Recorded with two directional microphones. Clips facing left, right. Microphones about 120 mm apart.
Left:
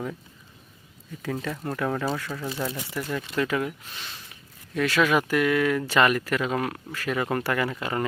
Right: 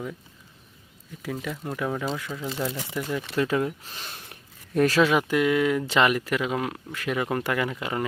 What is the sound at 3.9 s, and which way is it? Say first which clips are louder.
Speech: right 1 dB; 45° right (ahead or behind).